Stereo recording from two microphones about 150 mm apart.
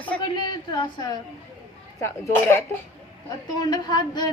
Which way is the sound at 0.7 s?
25° left (ahead or behind).